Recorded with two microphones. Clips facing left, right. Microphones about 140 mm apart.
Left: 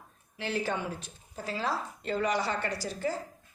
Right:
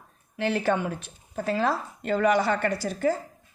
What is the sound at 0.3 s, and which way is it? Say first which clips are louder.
A woman's voice: right 7 dB; 60° right (ahead or behind).